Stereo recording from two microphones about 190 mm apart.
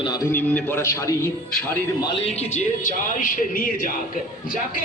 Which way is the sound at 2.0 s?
30° left (ahead or behind).